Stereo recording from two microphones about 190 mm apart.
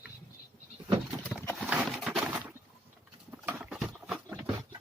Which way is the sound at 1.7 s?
5° right (ahead or behind).